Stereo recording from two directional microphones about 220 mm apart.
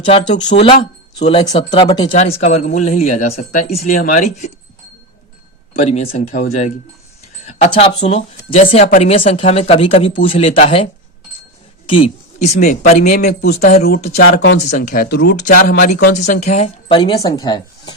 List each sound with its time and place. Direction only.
0.0 s speech: 25° left (ahead or behind)
5.9 s a woman's voice: 30° left (ahead or behind)
11.9 s a woman's voice: 25° left (ahead or behind)
14.2 s speech: 50° left (ahead or behind)
14.7 s a woman's voice: 35° left (ahead or behind)
15.4 s a woman's voice: 35° left (ahead or behind); by 17.9 s 20° left (ahead or behind)